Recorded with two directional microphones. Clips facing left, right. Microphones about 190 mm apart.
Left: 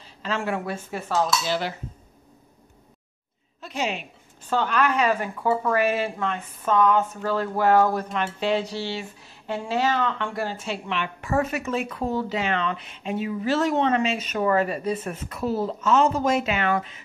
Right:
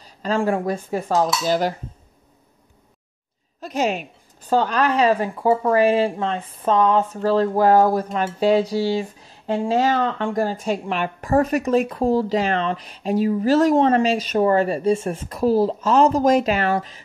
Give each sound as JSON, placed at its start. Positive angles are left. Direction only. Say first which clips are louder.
{"t": 0.0, "sound": "a woman's voice", "louder": "right 7 dB", "side_deg": -40}
{"t": 3.6, "sound": "a woman's voice", "louder": "right 6 dB", "side_deg": -45}